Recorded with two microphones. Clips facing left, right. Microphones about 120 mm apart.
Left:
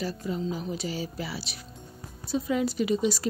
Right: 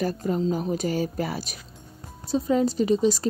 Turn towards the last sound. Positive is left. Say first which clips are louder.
# right 4 dB
turn(degrees=-40)  # may be behind; listen again after turning